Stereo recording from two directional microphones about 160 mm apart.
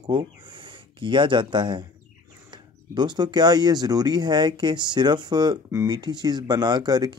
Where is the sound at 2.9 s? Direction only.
25° right (ahead or behind).